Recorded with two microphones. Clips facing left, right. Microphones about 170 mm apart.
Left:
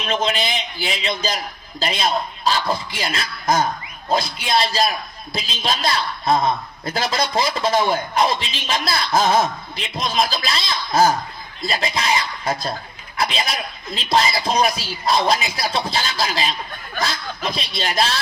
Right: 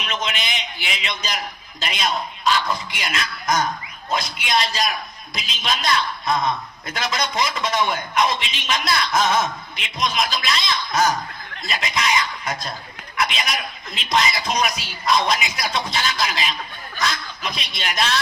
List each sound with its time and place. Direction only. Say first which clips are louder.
0.0 s a man's voice: left 6 dB; 30° left (ahead or behind)